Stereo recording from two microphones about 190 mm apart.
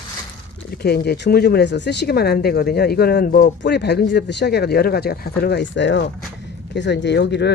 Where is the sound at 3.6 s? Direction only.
60° left (ahead or behind).